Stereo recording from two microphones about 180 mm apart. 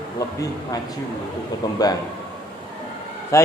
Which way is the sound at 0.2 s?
20° left (ahead or behind).